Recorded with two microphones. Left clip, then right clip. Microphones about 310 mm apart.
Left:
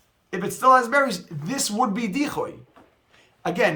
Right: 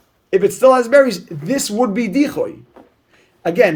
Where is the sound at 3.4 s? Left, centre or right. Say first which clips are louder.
Right 8 dB; centre.